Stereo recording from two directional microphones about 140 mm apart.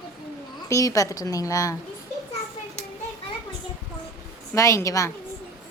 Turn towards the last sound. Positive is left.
turn(degrees=20)  # may be behind; listen again after turning